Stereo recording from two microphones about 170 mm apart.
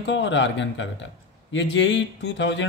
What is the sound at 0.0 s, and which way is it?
A man's voice, 90° left.